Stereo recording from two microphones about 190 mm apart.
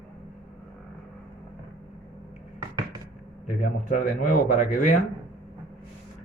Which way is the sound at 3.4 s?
45° left (ahead or behind).